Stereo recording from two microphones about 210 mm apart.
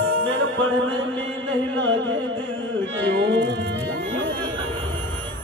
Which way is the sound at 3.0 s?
60° right (ahead or behind).